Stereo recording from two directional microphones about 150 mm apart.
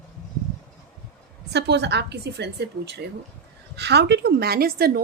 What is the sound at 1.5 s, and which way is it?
A woman's voice, 90° right.